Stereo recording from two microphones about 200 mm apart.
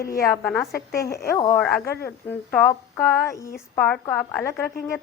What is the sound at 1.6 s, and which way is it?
A woman's voice, 5° left (ahead or behind).